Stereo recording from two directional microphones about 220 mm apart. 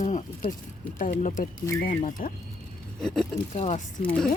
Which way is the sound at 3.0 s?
5° left (ahead or behind).